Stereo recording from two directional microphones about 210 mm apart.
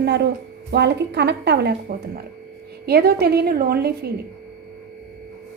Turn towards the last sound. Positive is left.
turn(degrees=-45)  # may be behind; listen again after turning